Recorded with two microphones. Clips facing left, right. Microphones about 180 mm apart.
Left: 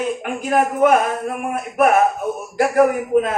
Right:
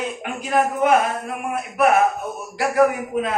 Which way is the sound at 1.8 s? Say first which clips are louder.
Left 2 dB; 50° left (ahead or behind).